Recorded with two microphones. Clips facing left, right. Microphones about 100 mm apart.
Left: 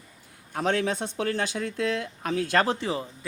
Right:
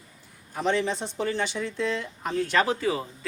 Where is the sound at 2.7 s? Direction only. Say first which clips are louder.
Right 2 dB; 25° left (ahead or behind).